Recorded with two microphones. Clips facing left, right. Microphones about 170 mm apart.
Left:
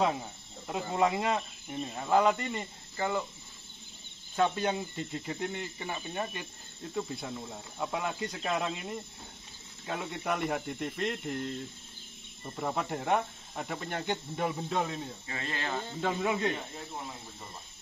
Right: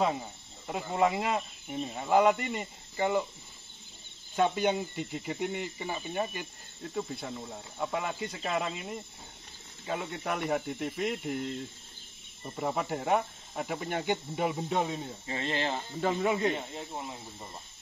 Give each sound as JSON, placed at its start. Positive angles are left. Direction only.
{"t": 0.7, "sound": "speech", "side_deg": -5}
{"t": 4.4, "sound": "speech", "side_deg": -5}
{"t": 15.3, "sound": "speech", "side_deg": -30}
{"t": 16.0, "sound": "speech", "side_deg": 0}